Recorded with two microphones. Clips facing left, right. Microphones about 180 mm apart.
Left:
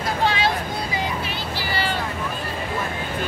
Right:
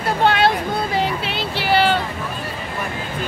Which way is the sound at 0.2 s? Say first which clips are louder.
Right 6 dB; 60° right (ahead or behind).